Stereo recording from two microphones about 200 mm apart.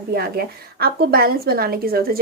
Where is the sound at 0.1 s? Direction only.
50° right (ahead or behind).